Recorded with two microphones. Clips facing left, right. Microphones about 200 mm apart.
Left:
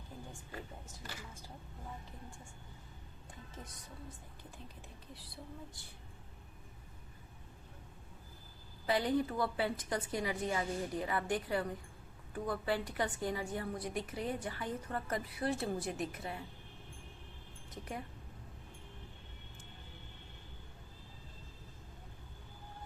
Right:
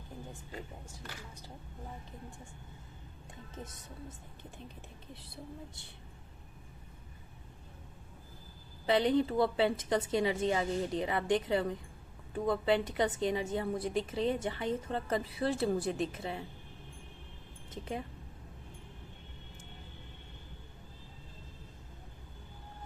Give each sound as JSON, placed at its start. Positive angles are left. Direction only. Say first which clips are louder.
{"t": 3.5, "sound": "a woman's voice", "louder": "right 6 dB", "side_deg": -25}
{"t": 5.1, "sound": "a woman's voice", "louder": "right 3 dB", "side_deg": -25}
{"t": 8.9, "sound": "a woman's voice", "louder": "right 5 dB", "side_deg": -25}
{"t": 17.7, "sound": "speech", "louder": "right 5 dB", "side_deg": -25}